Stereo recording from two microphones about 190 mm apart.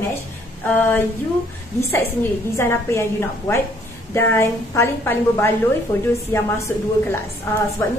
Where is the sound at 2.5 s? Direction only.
15° left (ahead or behind).